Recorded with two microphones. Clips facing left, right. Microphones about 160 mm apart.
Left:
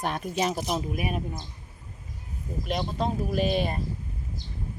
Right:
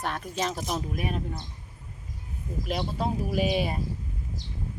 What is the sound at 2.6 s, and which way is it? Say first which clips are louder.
A woman's voice: left 1 dB; 5° right (ahead or behind).